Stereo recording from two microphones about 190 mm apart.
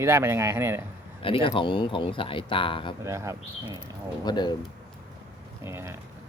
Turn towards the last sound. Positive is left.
turn(degrees=-15)  # may be behind; listen again after turning